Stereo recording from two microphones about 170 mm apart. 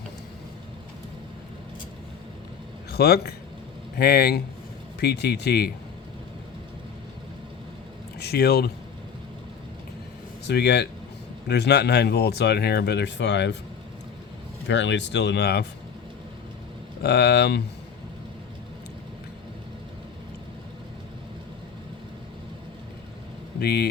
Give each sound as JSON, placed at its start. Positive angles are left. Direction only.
{"t": 2.9, "sound": "speech", "side_deg": 65}
{"t": 8.2, "sound": "speech", "side_deg": 70}
{"t": 10.4, "sound": "speech", "side_deg": 75}
{"t": 14.7, "sound": "speech", "side_deg": 90}
{"t": 17.0, "sound": "speech", "side_deg": 70}
{"t": 23.6, "sound": "speech", "side_deg": 65}